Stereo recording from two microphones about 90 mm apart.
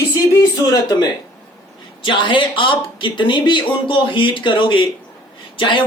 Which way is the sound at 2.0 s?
65° left (ahead or behind).